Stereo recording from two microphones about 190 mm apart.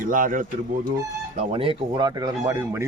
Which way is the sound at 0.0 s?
45° right (ahead or behind).